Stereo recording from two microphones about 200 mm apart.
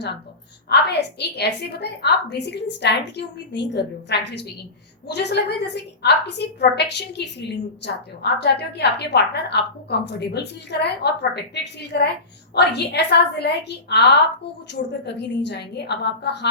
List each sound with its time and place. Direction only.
0.7 s a woman's voice: 55° left (ahead or behind)